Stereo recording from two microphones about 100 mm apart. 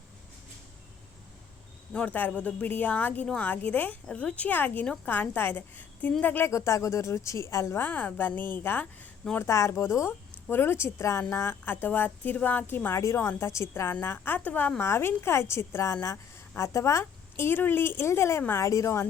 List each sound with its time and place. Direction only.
1.9 s a woman's voice: 10° left (ahead or behind)
9.4 s a woman's voice: 30° left (ahead or behind)